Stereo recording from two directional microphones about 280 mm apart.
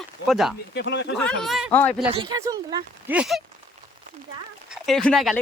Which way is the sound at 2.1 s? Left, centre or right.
Centre.